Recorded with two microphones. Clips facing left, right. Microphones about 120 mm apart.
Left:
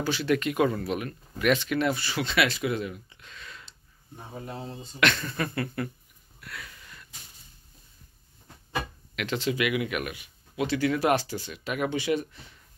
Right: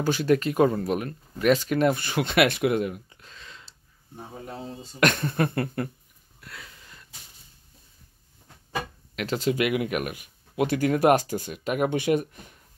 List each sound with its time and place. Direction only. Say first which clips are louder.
0.0 s speech: right 4 dB; 45° right (ahead or behind); by 3.7 s 30° right (ahead or behind)
5.0 s speech: right 4 dB; 50° right (ahead or behind)
6.4 s a sound: left 2 dB; 25° right (ahead or behind)
9.1 s speech: right 3 dB; 40° right (ahead or behind)